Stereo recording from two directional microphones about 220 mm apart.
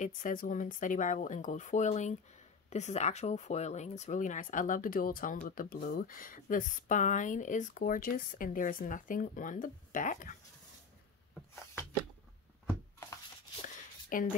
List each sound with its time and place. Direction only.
0.0 s speech: 35° left (ahead or behind)
14.1 s speech: 40° left (ahead or behind)